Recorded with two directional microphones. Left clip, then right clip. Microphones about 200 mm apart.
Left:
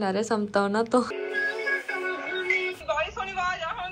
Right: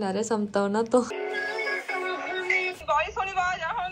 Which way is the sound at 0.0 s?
10° right (ahead or behind).